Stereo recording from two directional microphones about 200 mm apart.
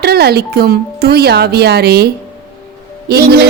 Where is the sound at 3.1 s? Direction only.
50° right (ahead or behind).